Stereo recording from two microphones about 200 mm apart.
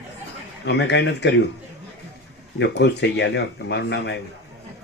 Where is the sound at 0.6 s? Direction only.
60° left (ahead or behind).